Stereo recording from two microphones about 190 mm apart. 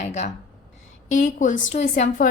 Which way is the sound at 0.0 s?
35° left (ahead or behind).